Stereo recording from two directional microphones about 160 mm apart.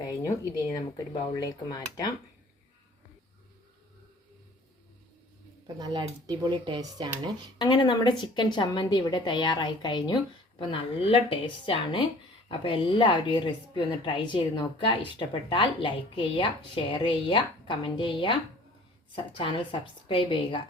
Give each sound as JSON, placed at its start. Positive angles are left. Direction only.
{"t": 0.3, "sound": "a woman's voice", "side_deg": 20}
{"t": 5.6, "sound": "speech", "side_deg": -25}
{"t": 7.6, "sound": "a woman's voice", "side_deg": 25}